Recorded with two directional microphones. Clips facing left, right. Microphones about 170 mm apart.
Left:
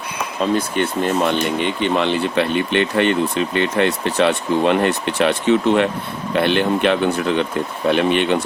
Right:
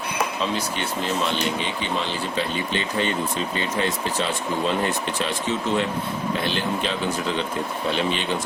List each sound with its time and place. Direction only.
0.3 s speech: 50° left (ahead or behind)